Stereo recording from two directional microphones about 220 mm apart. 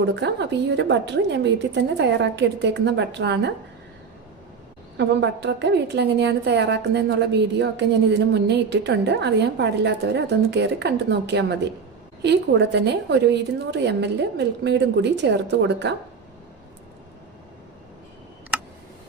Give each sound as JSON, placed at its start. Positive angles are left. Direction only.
{"t": 0.0, "sound": "a woman's voice", "side_deg": -50}
{"t": 4.9, "sound": "a woman's voice", "side_deg": -50}